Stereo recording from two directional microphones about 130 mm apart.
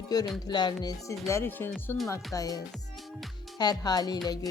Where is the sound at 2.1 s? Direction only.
25° left (ahead or behind).